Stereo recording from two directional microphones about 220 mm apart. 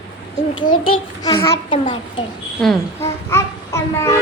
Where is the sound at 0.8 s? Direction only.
20° left (ahead or behind).